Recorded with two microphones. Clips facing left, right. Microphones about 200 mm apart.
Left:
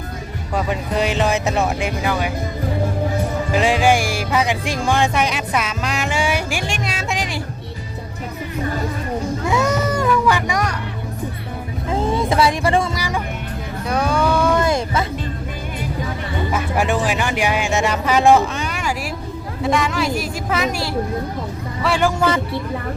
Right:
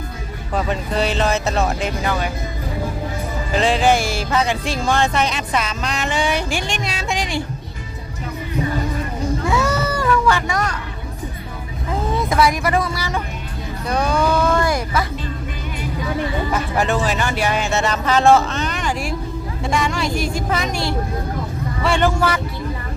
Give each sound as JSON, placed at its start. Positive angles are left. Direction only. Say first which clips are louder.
{"t": 0.5, "sound": "music", "louder": "even", "side_deg": 10}
{"t": 3.5, "sound": "music", "louder": "even", "side_deg": 10}
{"t": 9.4, "sound": "music", "louder": "left 1 dB", "side_deg": 20}
{"t": 11.9, "sound": "music", "louder": "left 2 dB", "side_deg": 30}
{"t": 13.8, "sound": "music", "louder": "even", "side_deg": 5}
{"t": 14.4, "sound": "a sound", "louder": "left 1 dB", "side_deg": 20}
{"t": 16.5, "sound": "music", "louder": "left 3 dB", "side_deg": 10}
{"t": 19.6, "sound": "a woman's voice", "louder": "left 2 dB", "side_deg": 0}